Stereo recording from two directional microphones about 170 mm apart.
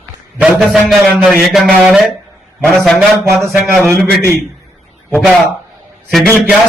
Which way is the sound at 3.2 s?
15° right (ahead or behind).